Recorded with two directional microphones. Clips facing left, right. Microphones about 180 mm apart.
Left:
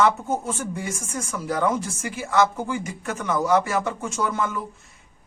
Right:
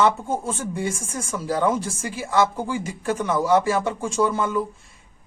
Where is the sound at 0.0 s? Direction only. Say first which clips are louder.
Even; 30° right (ahead or behind).